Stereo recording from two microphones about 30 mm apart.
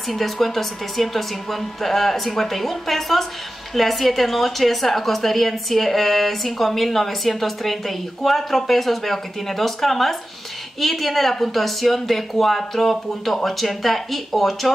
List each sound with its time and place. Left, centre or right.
0.1 s a woman's voice: centre